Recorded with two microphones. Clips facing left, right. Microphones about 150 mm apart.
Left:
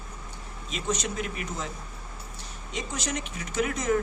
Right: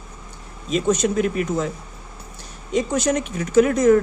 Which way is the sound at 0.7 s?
50° right (ahead or behind).